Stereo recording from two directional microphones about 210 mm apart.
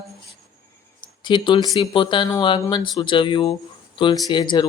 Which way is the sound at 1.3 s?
20° left (ahead or behind).